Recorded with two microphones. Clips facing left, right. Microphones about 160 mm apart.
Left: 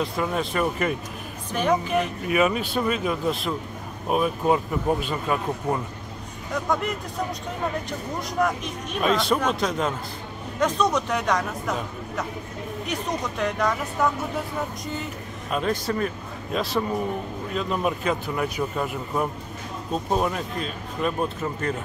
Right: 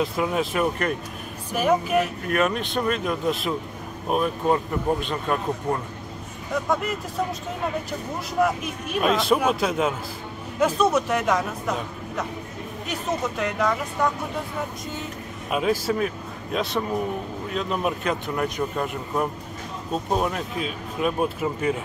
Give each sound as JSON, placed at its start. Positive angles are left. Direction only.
{"t": 0.0, "sound": "speech", "side_deg": 0}
{"t": 8.4, "sound": "speech", "side_deg": -5}
{"t": 13.4, "sound": "speech", "side_deg": 0}
{"t": 15.5, "sound": "speech", "side_deg": -5}